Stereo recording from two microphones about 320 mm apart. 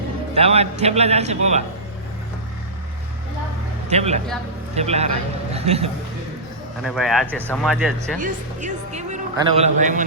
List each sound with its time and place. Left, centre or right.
0.3 s speech: centre
3.8 s a man's voice: centre
6.8 s speech: centre
8.2 s speech: right